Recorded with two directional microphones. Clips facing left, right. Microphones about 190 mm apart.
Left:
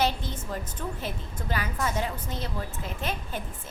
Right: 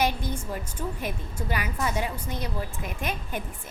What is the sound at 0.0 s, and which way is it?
A woman's voice, 15° right (ahead or behind).